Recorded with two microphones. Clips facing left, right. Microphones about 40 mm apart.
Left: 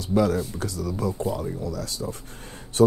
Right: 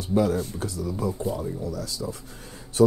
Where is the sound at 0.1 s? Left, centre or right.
Left.